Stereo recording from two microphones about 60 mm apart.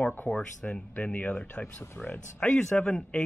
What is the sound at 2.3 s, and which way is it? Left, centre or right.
Speech, centre.